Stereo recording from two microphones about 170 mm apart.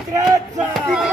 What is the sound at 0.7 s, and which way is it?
Speech, centre (ahead or behind).